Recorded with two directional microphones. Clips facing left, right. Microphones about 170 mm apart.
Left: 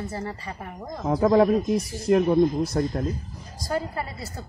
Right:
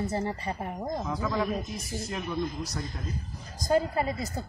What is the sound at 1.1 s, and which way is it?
Speech, 55° left (ahead or behind).